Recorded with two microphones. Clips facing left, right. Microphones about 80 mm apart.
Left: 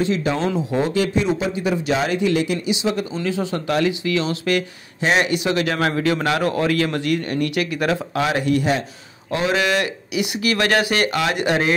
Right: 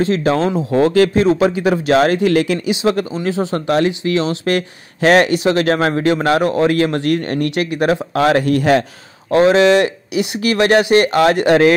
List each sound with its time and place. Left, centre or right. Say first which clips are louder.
0.0 s speech: right 5 dB; right
0.7 s speech: right 9 dB; right
3.2 s speech: right 4 dB; right
5.0 s speech: right 7 dB; right
5.3 s speech: right 6 dB; right
7.5 s speech: right 7 dB; right
8.1 s speech: right 6 dB; right
9.5 s speech: right 6 dB; right
11.1 s speech: right 8 dB; right